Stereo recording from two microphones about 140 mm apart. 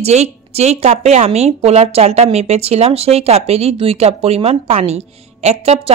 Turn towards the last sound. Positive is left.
turn(degrees=-50)  # may be behind; listen again after turning